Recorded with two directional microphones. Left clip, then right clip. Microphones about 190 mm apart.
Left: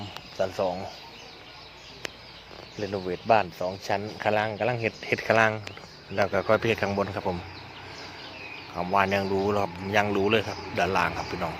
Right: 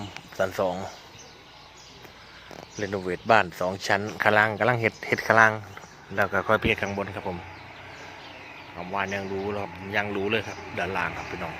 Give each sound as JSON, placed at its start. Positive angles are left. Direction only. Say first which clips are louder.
{"t": 0.3, "sound": "speech", "louder": "right 1 dB", "side_deg": -25}
{"t": 2.8, "sound": "speech", "louder": "right 1 dB", "side_deg": -15}
{"t": 8.9, "sound": "speech", "louder": "left 5 dB", "side_deg": 15}